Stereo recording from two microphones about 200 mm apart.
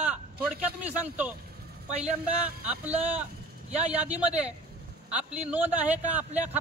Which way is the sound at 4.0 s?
5° right (ahead or behind).